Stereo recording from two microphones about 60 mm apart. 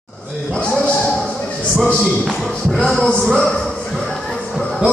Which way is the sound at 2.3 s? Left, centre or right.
Centre.